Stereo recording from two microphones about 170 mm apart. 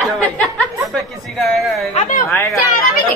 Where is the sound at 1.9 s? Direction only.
50° left (ahead or behind).